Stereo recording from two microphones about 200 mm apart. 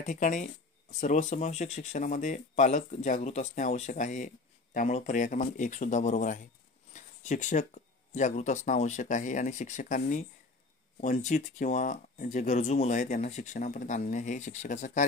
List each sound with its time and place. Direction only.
0.0 s speech: 40° left (ahead or behind)